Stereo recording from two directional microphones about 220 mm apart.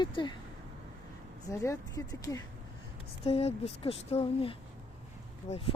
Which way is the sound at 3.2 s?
25° left (ahead or behind).